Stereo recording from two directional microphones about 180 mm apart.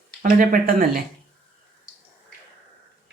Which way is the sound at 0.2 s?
50° right (ahead or behind).